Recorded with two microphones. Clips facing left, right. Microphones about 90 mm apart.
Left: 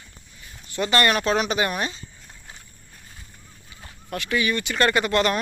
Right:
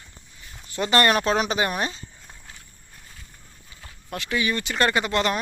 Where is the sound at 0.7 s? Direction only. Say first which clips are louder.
Right 1 dB; 30° right (ahead or behind).